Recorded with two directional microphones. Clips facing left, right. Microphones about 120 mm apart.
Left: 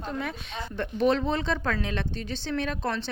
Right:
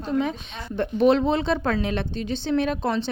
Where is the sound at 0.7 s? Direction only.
30° right (ahead or behind).